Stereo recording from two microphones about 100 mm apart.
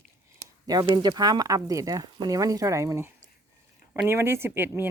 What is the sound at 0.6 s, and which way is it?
Speech, 45° right (ahead or behind).